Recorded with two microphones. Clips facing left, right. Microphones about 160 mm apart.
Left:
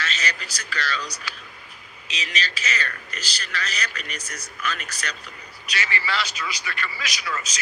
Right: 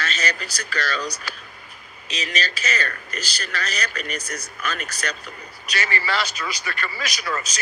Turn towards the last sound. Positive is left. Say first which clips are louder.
# right 3 dB
turn(degrees=-45)  # may be behind; listen again after turning